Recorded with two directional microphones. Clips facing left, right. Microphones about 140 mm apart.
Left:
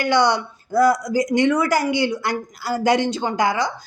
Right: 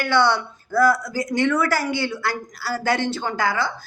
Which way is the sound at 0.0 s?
15° left (ahead or behind).